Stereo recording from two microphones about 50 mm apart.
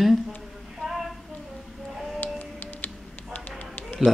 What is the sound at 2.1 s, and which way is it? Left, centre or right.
Music, left.